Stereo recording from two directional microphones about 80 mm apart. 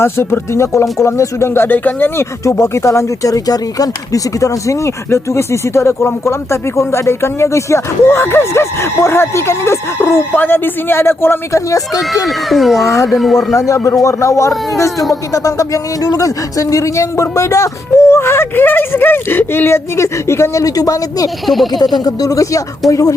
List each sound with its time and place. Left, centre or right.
0.0 s speech: left
2.4 s speech: left
3.3 s speech: left
12.5 s speech: centre
12.8 s speech: left
13.1 s speech: centre
13.6 s speech: left
14.9 s speech: centre
15.3 s speech: left
21.4 s speech: centre
21.7 s speech: left